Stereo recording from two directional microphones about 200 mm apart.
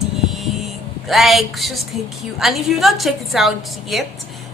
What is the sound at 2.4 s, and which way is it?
A woman's voice, centre (ahead or behind).